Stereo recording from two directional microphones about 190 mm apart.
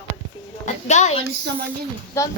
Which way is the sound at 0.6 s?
35° left (ahead or behind).